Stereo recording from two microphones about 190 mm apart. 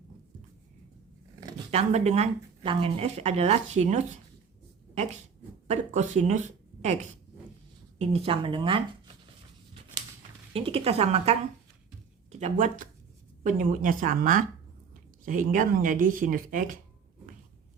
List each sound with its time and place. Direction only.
1.7 s speech: 35° right (ahead or behind)
5.6 s a woman's voice: 35° right (ahead or behind)
10.5 s speech: 30° right (ahead or behind); by 16.8 s 45° right (ahead or behind)